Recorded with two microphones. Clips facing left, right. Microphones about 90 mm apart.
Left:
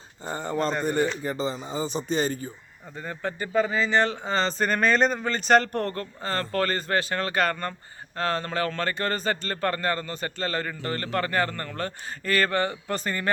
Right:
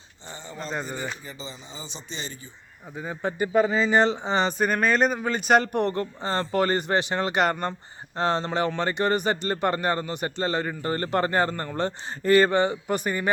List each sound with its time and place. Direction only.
0.3 s speech: 50° left (ahead or behind)
3.0 s speech: 15° right (ahead or behind)